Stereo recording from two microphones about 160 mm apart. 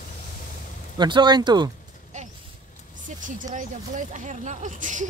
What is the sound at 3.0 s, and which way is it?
Speech, 50° right (ahead or behind).